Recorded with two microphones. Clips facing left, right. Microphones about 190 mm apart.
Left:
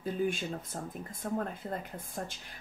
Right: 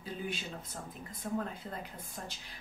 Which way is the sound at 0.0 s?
50° left (ahead or behind).